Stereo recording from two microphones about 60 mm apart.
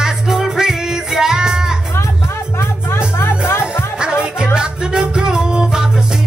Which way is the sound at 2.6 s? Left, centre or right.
Left.